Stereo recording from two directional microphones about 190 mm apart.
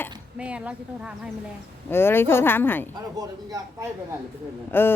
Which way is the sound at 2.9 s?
20° right (ahead or behind).